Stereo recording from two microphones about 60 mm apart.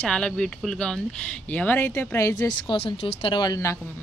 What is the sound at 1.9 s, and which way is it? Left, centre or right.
Speech, left.